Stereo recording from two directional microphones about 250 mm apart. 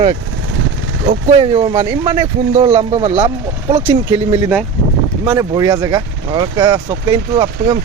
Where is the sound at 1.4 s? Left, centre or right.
Centre.